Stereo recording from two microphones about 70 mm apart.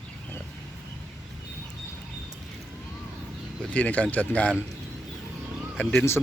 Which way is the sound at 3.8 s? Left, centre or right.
Centre.